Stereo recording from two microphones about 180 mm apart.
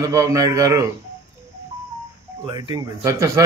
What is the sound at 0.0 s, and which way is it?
Speech, 20° right (ahead or behind).